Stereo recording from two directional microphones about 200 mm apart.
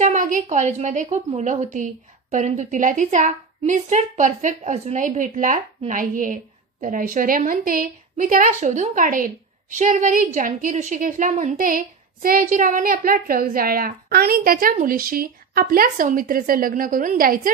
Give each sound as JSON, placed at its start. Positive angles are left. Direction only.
{"t": 0.0, "sound": "a woman's voice", "side_deg": -40}